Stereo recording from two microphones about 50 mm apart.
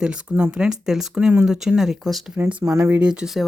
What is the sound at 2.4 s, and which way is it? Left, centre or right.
Speech, right.